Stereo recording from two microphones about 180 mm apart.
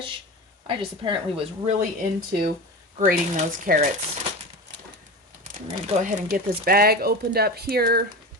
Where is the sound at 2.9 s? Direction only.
45° right (ahead or behind).